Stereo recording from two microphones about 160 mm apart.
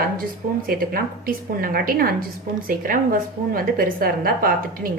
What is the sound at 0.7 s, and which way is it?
A woman's voice, 65° right (ahead or behind).